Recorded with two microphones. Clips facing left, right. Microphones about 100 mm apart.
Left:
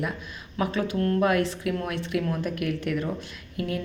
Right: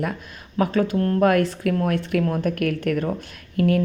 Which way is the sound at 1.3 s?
50° right (ahead or behind).